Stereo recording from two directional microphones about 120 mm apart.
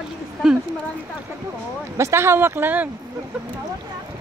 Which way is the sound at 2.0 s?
25° right (ahead or behind).